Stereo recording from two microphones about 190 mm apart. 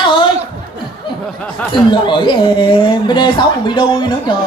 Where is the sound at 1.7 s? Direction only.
25° left (ahead or behind).